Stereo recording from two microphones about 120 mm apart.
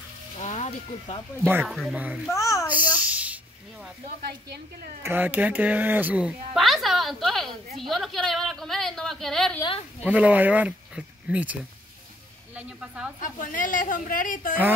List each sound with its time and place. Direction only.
0.4 s mechanisms: 65° left (ahead or behind)
1.7 s a woman's voice: centre (ahead or behind)
2.0 s speech: 10° right (ahead or behind)
2.2 s a child's voice: 25° left (ahead or behind)
2.7 s a sound: 15° right (ahead or behind)
5.0 s speech: 15° right (ahead or behind)
6.5 s a woman's voice: centre (ahead or behind)
10.0 s speech: 10° right (ahead or behind)
12.5 s speech: 10° right (ahead or behind)
13.2 s a woman's voice: 90° left